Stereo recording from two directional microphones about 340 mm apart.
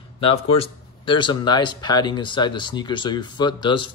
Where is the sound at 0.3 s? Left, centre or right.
Centre.